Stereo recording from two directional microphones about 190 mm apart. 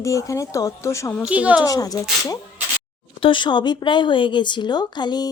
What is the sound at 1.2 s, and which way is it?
Speech, 5° right (ahead or behind).